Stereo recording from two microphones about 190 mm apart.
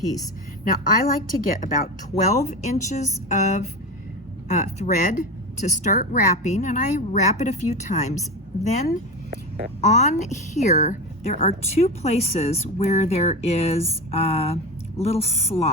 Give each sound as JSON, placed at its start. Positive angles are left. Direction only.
{"t": 0.6, "sound": "speech", "side_deg": 45}
{"t": 9.8, "sound": "speech", "side_deg": 35}